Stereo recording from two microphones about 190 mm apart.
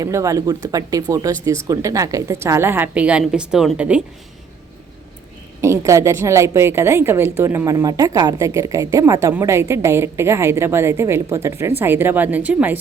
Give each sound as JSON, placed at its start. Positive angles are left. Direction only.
{"t": 0.0, "sound": "a woman's voice", "side_deg": -15}
{"t": 5.6, "sound": "a woman's voice", "side_deg": -15}